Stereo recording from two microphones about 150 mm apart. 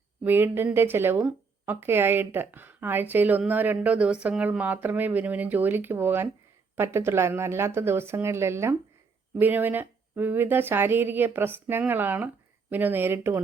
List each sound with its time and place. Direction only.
0.3 s speech: 15° right (ahead or behind)